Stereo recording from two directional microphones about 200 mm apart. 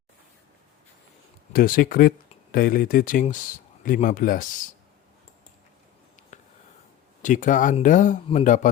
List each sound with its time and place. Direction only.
1.5 s speech: 45° left (ahead or behind)
7.2 s speech: 40° left (ahead or behind)